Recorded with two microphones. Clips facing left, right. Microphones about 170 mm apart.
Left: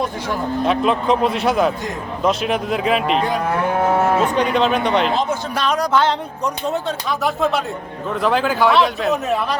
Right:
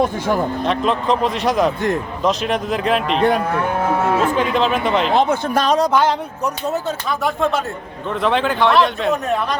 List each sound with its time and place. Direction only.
0.6 s speech: 5° left (ahead or behind)
5.1 s speech: 60° right (ahead or behind)
5.6 s speech: 30° right (ahead or behind)
5.9 s speech: 10° right (ahead or behind)